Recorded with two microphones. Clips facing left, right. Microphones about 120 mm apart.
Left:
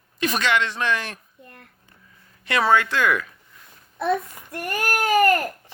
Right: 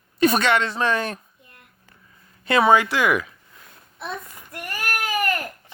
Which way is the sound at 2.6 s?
15° right (ahead or behind).